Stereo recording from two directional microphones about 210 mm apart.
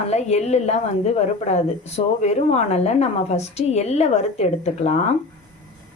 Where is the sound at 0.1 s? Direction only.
30° left (ahead or behind).